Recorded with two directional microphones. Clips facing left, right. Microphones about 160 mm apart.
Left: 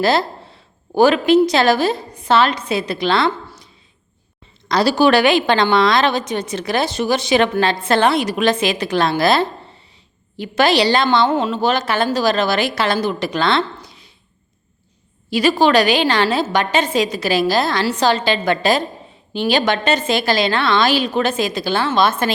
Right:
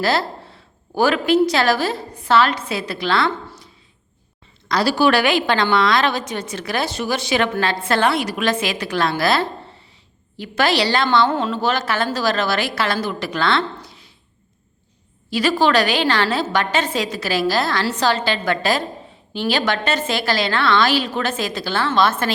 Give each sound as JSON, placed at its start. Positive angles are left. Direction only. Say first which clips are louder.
{"t": 0.0, "sound": "a woman's voice", "louder": "left 3 dB", "side_deg": 20}
{"t": 4.7, "sound": "a woman's voice", "louder": "left 3 dB", "side_deg": 20}
{"t": 15.3, "sound": "a woman's voice", "louder": "left 3 dB", "side_deg": 15}